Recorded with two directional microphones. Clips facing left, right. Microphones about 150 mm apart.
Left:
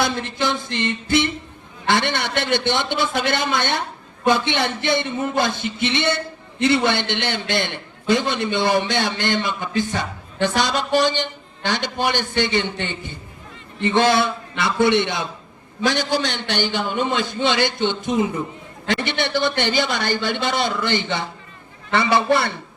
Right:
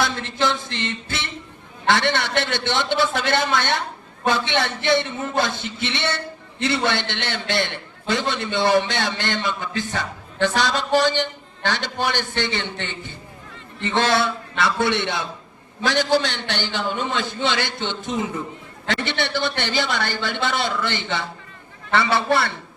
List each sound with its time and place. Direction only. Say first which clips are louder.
0.0 s a man's voice: left 1 dB; 15° left (ahead or behind)